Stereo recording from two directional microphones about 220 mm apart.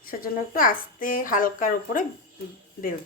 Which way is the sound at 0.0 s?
40° left (ahead or behind).